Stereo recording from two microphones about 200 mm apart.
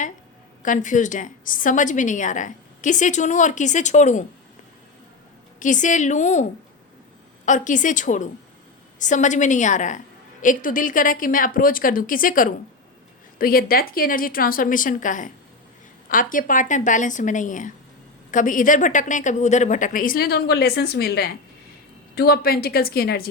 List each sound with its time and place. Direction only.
0.6 s a woman's voice: 40° left (ahead or behind)
5.5 s a woman's voice: 40° left (ahead or behind)
7.4 s a woman's voice: 40° left (ahead or behind)